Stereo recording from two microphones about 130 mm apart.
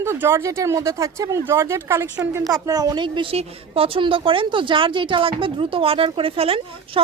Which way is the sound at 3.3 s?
45° right (ahead or behind).